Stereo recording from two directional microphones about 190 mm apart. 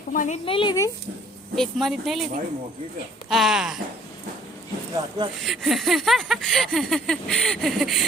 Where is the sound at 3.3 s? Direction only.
Centre (ahead or behind).